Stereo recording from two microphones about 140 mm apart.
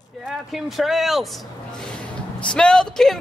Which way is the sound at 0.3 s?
Centre (ahead or behind).